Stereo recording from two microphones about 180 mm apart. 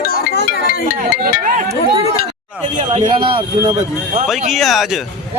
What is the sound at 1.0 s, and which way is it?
Speech, 45° right (ahead or behind).